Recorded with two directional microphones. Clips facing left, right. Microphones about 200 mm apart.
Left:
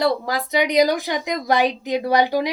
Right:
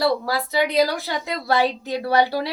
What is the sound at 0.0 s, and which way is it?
A woman's voice, 20° left (ahead or behind).